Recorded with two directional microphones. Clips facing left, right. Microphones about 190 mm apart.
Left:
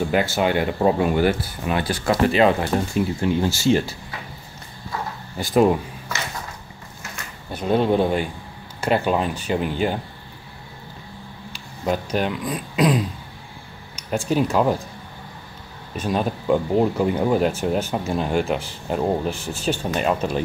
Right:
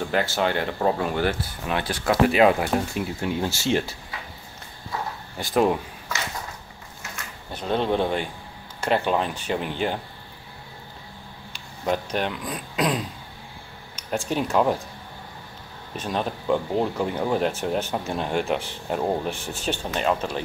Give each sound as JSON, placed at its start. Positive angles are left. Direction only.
{"t": 0.0, "sound": "a sound", "side_deg": 10}
{"t": 0.4, "sound": "speech", "side_deg": 10}
{"t": 5.4, "sound": "speech", "side_deg": 0}
{"t": 7.5, "sound": "speech", "side_deg": 10}
{"t": 11.8, "sound": "speech", "side_deg": 5}
{"t": 16.0, "sound": "speech", "side_deg": 5}
{"t": 19.9, "sound": "speech", "side_deg": 10}